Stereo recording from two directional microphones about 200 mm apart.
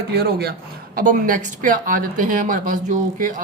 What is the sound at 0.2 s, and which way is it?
Speech, 55° right (ahead or behind).